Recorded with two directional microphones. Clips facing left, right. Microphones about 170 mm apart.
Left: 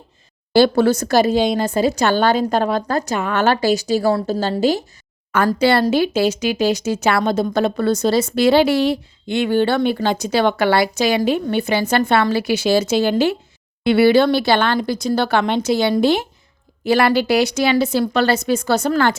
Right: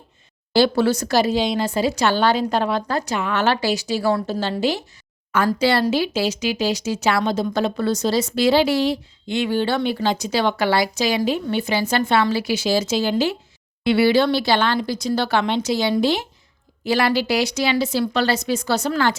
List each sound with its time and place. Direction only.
0.5 s speech: 50° left (ahead or behind)
5.5 s speech: 55° left (ahead or behind)